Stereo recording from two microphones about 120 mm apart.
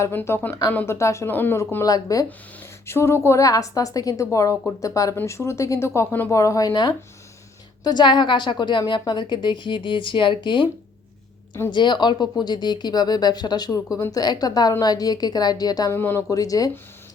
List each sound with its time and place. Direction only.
0.0 s a woman's voice: 20° left (ahead or behind)
6.4 s speech: 30° left (ahead or behind)
11.7 s speech: 40° left (ahead or behind)
15.9 s a woman's voice: 20° left (ahead or behind)
16.3 s speech: 30° left (ahead or behind)